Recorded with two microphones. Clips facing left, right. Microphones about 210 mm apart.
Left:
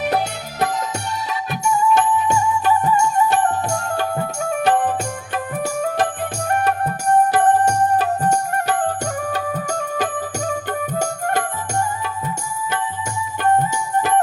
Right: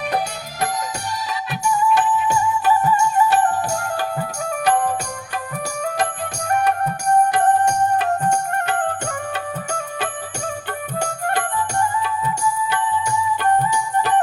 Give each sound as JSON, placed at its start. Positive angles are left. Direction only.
{"t": 7.8, "sound": "music", "side_deg": 35}